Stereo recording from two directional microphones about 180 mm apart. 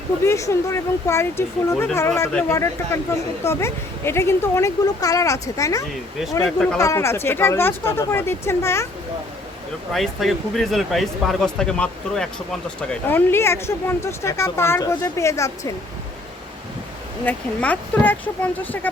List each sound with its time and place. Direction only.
0.3 s speech: 15° left (ahead or behind)
9.9 s speech: centre (ahead or behind); by 15.7 s 15° left (ahead or behind)
17.2 s speech: 10° left (ahead or behind)